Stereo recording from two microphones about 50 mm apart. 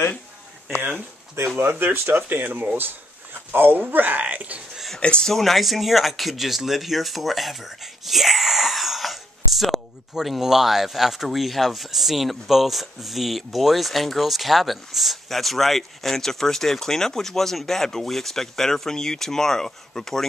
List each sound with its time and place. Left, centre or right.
1.6 s speech: right
5.0 s speech: left
5.3 s speech: centre